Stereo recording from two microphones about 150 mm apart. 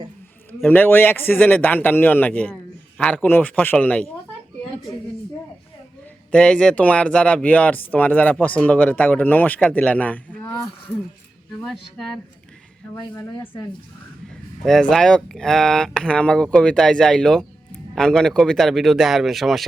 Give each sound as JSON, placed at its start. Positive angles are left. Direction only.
{"t": 0.6, "sound": "speech", "side_deg": 15}
{"t": 6.3, "sound": "speech", "side_deg": 5}
{"t": 10.4, "sound": "a sound", "side_deg": 25}
{"t": 11.6, "sound": "speech", "side_deg": 5}
{"t": 12.9, "sound": "speech", "side_deg": 20}
{"t": 14.6, "sound": "speech", "side_deg": 5}